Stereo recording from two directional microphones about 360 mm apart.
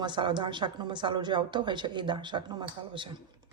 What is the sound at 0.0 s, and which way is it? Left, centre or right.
A woman's voice, centre.